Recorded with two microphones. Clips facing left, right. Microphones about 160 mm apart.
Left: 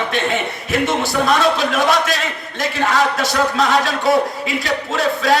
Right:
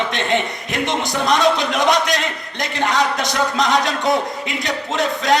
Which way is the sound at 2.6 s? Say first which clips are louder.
Left 2 dB; 20° right (ahead or behind).